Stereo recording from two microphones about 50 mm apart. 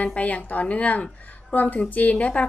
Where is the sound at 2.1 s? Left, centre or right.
Left.